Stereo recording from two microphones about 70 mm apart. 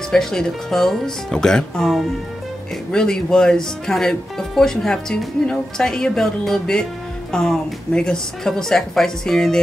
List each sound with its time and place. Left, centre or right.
0.1 s speech: centre